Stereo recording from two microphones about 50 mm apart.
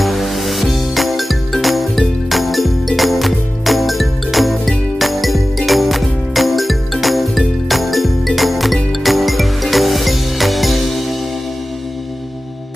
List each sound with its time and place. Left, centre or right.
0.0 s music: centre